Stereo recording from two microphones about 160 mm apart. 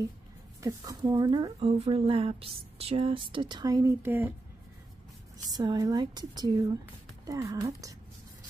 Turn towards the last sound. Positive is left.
turn(degrees=-20)  # may be behind; listen again after turning